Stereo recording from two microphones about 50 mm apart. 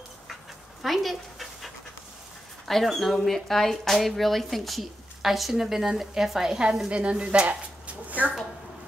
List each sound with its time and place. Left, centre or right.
0.8 s dog: centre
2.7 s speech: centre
6.9 s speech: right
7.4 s a sound: right